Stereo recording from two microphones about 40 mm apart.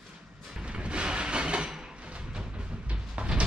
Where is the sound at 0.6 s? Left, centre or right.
Right.